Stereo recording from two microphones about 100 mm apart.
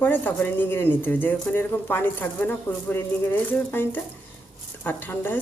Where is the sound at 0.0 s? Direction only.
20° left (ahead or behind).